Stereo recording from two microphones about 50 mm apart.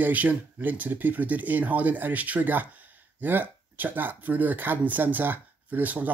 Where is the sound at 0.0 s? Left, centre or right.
Right.